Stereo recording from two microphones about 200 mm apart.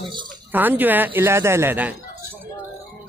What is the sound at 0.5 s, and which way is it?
Speech, 10° right (ahead or behind).